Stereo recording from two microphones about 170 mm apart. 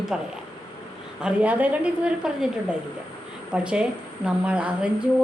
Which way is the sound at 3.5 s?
5° right (ahead or behind).